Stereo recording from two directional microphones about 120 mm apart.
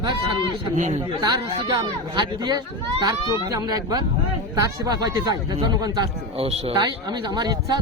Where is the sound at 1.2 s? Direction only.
40° right (ahead or behind).